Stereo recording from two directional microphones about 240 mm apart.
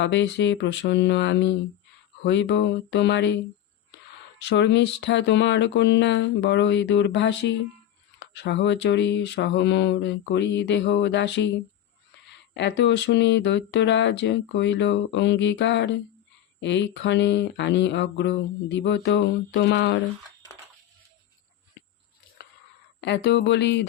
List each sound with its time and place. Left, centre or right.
0.0 s speech: left
4.4 s speech: left
21.8 s a sound: left
23.0 s speech: left